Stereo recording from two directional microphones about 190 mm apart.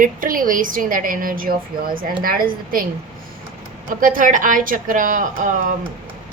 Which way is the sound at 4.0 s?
45° right (ahead or behind).